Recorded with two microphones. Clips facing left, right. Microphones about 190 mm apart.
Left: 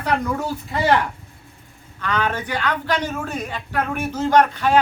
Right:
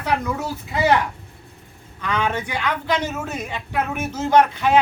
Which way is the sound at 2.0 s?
10° right (ahead or behind).